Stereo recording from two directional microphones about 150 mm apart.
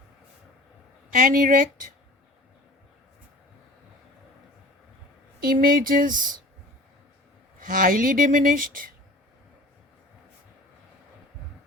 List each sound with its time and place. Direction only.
1.1 s speech: 65° right (ahead or behind)
5.5 s speech: 70° right (ahead or behind)
7.6 s speech: 70° right (ahead or behind)